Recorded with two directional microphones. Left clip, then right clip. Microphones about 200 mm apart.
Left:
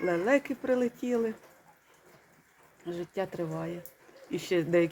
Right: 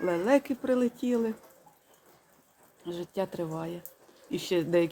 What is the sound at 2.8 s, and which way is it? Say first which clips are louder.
Speech: right 1 dB; 15° right (ahead or behind).